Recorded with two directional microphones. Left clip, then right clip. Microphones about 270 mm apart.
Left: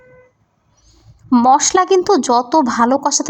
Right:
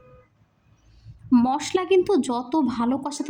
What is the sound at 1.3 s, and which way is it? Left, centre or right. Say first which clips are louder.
Speech: left 11 dB; centre.